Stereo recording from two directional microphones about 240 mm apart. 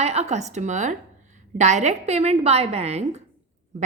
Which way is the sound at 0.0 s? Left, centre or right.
Right.